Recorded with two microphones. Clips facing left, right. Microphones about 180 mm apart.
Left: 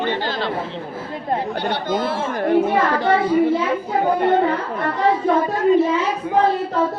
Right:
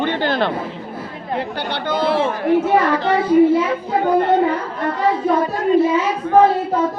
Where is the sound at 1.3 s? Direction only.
70° right (ahead or behind).